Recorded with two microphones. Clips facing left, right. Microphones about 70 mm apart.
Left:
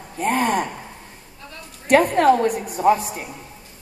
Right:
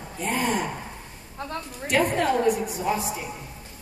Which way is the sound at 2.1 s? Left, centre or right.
Left.